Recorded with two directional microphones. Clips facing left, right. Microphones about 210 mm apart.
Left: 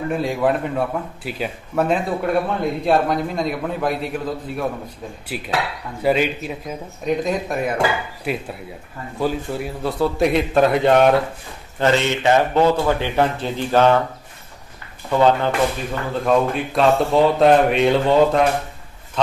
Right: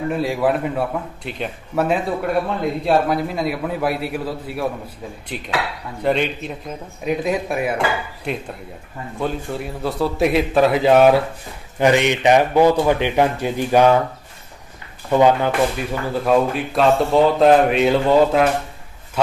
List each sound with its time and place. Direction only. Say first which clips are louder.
0.2 s speech: right 1 dB; 5° right (ahead or behind)
5.3 s speech: left 1 dB; 5° left (ahead or behind)
7.1 s a man's voice: even; 5° right (ahead or behind)
8.3 s speech: left 1 dB; 5° left (ahead or behind)
11.8 s a man's voice: right 2 dB; 15° right (ahead or behind)
15.0 s speech: right 1 dB; 15° right (ahead or behind)